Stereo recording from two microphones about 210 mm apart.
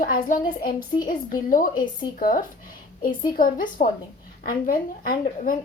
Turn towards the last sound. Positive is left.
turn(degrees=40)  # may be behind; listen again after turning